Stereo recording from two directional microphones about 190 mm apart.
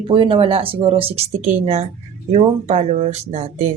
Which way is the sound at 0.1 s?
25° right (ahead or behind).